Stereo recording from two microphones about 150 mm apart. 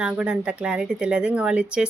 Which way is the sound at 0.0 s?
5° right (ahead or behind).